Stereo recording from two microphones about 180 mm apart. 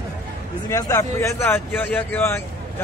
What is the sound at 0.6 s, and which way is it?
Speech, 20° left (ahead or behind).